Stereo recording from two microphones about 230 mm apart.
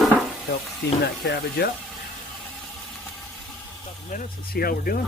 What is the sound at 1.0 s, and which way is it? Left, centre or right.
Speech, left.